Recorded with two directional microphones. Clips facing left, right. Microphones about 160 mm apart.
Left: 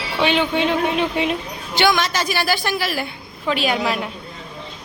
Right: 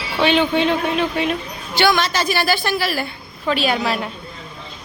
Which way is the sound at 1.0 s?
20° left (ahead or behind).